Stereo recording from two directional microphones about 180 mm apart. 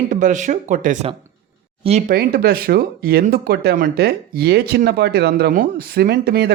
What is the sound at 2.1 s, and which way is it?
Speech, 55° right (ahead or behind).